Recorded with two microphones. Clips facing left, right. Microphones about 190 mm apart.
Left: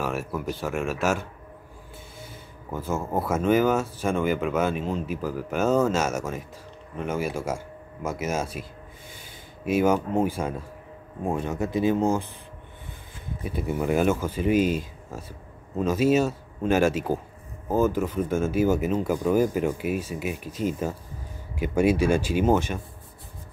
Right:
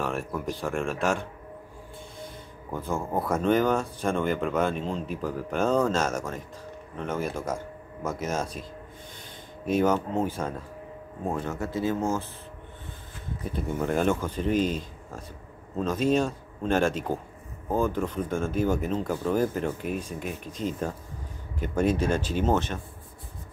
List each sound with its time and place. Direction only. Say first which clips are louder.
0.0 s speech: left 1 dB; 5° left (ahead or behind)
9.7 s speech: left 2 dB; 10° left (ahead or behind)
13.4 s speech: left 2 dB; 10° left (ahead or behind)